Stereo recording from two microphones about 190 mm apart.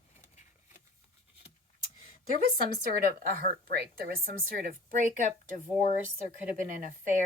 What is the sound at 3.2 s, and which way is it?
Speech, 50° right (ahead or behind).